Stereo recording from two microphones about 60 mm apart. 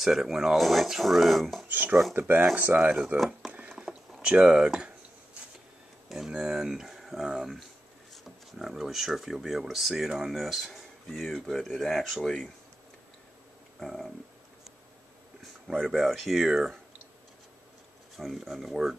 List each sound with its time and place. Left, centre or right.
0.0 s speech: centre
1.7 s speech: right
4.2 s speech: centre
6.0 s speech: centre
13.7 s speech: centre
15.8 s speech: centre
18.1 s speech: centre